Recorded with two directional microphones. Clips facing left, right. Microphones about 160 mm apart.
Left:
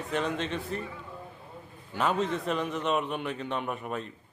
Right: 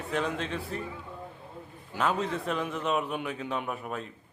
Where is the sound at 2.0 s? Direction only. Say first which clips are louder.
Left 1 dB; centre (ahead or behind).